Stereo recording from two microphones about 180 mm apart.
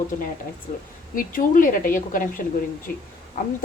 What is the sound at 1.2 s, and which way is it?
A woman's voice, 50° left (ahead or behind).